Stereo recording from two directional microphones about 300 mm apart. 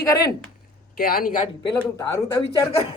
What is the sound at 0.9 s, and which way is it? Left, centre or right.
Speech, left.